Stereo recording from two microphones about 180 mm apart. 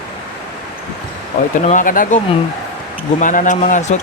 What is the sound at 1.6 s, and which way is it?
Speech, 45° left (ahead or behind).